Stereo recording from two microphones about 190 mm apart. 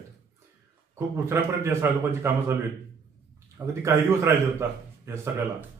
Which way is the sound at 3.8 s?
15° right (ahead or behind).